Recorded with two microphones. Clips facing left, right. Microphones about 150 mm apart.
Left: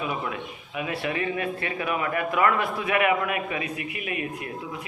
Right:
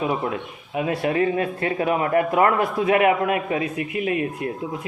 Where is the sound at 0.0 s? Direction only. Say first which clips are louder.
Right 6 dB; 30° right (ahead or behind).